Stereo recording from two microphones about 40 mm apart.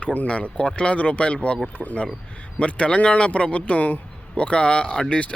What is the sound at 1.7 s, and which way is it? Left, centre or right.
Speech, left.